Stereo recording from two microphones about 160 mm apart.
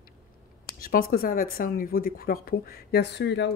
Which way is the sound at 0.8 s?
65° left (ahead or behind).